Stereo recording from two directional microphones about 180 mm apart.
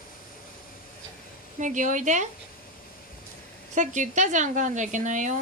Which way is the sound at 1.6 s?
45° right (ahead or behind).